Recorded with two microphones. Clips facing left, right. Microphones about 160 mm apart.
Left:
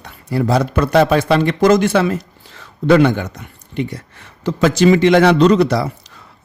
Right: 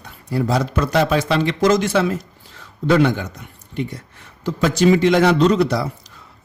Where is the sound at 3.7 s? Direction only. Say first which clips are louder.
Left 3 dB; 75° left (ahead or behind).